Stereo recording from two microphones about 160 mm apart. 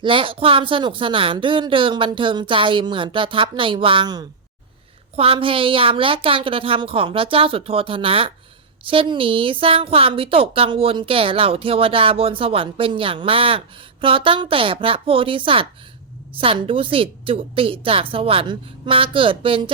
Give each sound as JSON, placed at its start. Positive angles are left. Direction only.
{"t": 0.0, "sound": "a woman's voice", "side_deg": -35}